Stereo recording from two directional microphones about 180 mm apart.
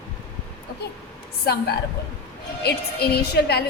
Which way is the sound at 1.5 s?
60° left (ahead or behind).